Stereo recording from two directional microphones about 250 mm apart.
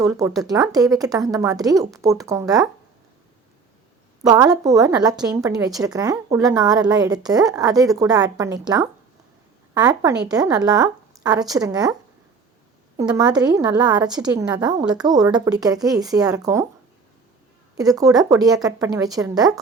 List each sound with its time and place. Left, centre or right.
0.0 s a woman's voice: centre
4.2 s a woman's voice: centre
13.0 s a woman's voice: centre
17.7 s a woman's voice: centre